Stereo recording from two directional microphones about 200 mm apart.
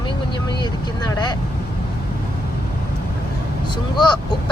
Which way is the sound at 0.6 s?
20° left (ahead or behind).